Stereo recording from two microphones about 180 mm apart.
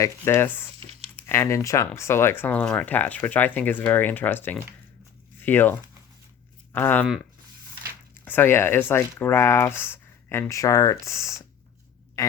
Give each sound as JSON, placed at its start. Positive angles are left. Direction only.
{"t": 0.0, "sound": "speech", "side_deg": 15}
{"t": 0.8, "sound": "crumpling", "side_deg": -35}
{"t": 1.1, "sound": "speech", "side_deg": 15}
{"t": 6.7, "sound": "speech", "side_deg": 10}
{"t": 8.2, "sound": "speech", "side_deg": 10}